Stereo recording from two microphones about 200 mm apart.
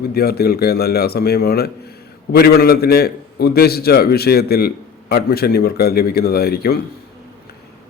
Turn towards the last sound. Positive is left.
turn(degrees=50)  # may be behind; listen again after turning